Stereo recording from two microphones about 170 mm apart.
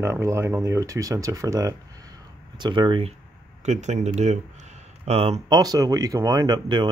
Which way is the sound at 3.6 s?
45° right (ahead or behind).